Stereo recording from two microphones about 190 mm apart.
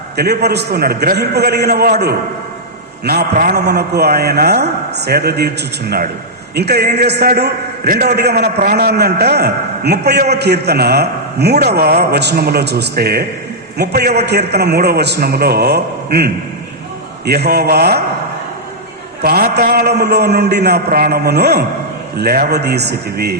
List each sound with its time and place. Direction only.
0.2 s a man's voice: 60° right (ahead or behind)
6.6 s a man's voice: 60° right (ahead or behind)
19.2 s a man's voice: 55° right (ahead or behind)